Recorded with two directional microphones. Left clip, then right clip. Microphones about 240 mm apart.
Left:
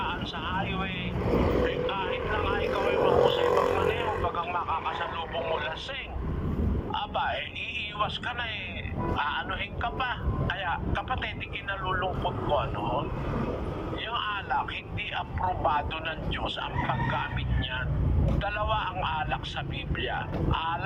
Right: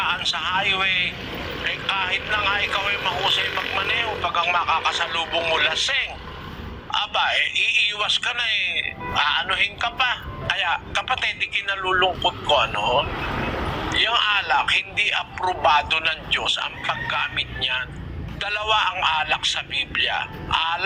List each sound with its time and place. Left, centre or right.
0.0 s a man's voice: right
13.9 s a man's voice: right